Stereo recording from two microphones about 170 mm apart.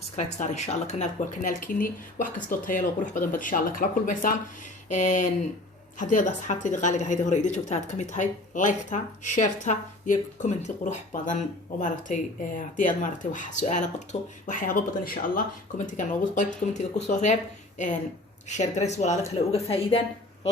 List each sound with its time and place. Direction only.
0.2 s a woman's voice: 45° left (ahead or behind)
18.4 s a woman's voice: 40° left (ahead or behind)